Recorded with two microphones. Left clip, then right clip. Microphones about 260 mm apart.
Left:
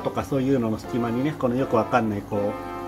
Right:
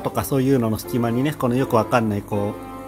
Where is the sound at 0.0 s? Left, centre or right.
Right.